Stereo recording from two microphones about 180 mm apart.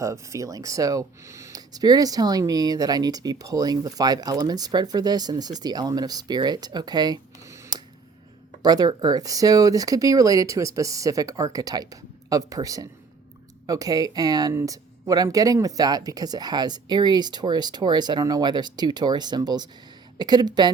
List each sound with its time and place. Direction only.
0.0 s speech: 15° right (ahead or behind)